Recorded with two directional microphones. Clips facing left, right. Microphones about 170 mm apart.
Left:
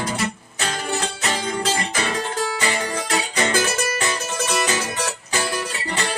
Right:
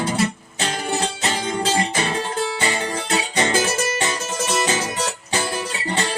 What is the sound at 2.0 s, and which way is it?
Music, 30° right (ahead or behind).